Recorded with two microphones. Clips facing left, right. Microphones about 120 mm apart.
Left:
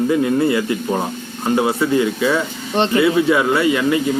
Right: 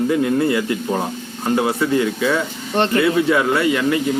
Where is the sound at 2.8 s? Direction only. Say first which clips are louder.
Left 1 dB; 20° left (ahead or behind).